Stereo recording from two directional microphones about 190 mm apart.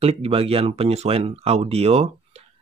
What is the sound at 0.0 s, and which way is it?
Speech, 30° right (ahead or behind).